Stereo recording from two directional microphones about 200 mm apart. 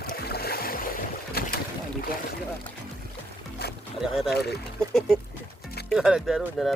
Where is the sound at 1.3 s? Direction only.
50° left (ahead or behind).